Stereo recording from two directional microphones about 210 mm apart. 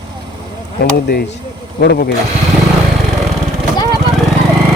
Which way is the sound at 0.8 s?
45° left (ahead or behind).